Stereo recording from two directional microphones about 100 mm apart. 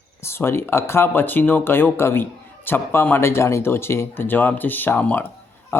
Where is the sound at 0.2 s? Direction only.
25° left (ahead or behind).